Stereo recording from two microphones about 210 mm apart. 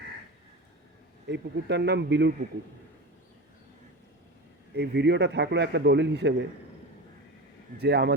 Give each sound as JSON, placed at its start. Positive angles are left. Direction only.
{"t": 1.3, "sound": "speech", "side_deg": -55}
{"t": 4.7, "sound": "a man's voice", "side_deg": -50}
{"t": 7.8, "sound": "a man's voice", "side_deg": -50}